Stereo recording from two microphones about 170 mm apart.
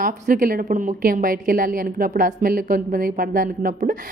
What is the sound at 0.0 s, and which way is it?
A woman's voice, 55° right (ahead or behind).